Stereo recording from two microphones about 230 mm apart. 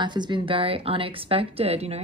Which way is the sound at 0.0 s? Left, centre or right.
Centre.